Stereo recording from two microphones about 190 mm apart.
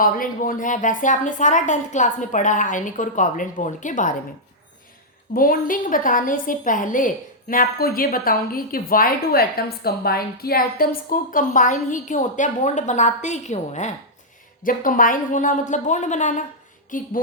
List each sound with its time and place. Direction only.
0.0 s a woman's voice: 45° left (ahead or behind)
5.3 s a woman's voice: 50° left (ahead or behind)